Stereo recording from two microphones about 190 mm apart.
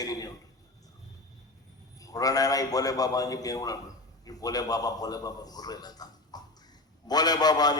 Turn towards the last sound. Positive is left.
turn(degrees=20)  # may be behind; listen again after turning